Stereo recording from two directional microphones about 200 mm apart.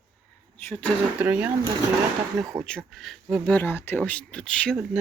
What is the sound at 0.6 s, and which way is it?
Speech, 10° left (ahead or behind).